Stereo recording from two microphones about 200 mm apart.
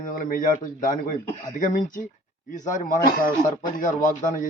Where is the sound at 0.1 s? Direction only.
45° left (ahead or behind).